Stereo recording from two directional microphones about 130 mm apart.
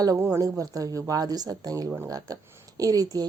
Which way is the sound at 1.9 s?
15° right (ahead or behind).